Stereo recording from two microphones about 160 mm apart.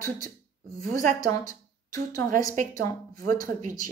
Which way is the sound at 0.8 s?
55° right (ahead or behind).